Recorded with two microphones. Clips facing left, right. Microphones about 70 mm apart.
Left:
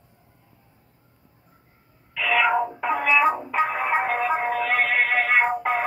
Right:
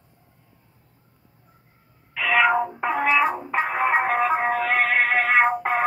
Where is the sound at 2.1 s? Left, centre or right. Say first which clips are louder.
Right 1 dB; right.